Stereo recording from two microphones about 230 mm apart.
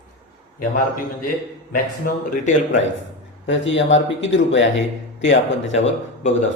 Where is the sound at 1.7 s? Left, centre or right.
Left.